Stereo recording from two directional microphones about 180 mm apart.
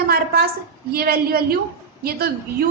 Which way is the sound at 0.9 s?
55° right (ahead or behind).